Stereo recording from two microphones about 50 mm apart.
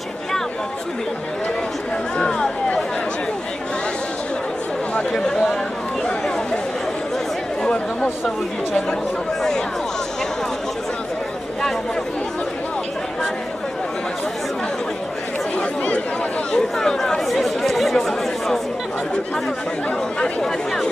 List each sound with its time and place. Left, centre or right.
2.1 s a sound: centre
4.9 s speech: centre
6.0 s a sound: centre
7.6 s chatter: centre
16.5 s chatter: centre
20.2 s speech: centre